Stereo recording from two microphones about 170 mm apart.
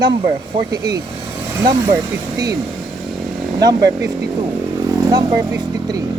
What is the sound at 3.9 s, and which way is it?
Speech, 20° right (ahead or behind).